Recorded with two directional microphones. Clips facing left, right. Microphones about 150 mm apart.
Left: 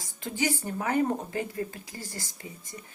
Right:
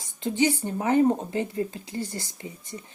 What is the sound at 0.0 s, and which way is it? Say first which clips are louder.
Speech: right 7 dB; 20° right (ahead or behind).